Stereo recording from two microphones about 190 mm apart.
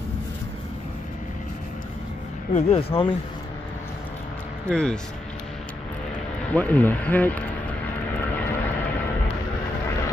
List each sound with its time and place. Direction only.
2.5 s speech: 30° left (ahead or behind)
4.6 s speech: 5° left (ahead or behind)
6.5 s speech: 10° left (ahead or behind)